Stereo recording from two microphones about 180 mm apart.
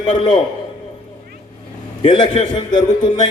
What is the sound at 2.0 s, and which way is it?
A man's voice, 25° left (ahead or behind).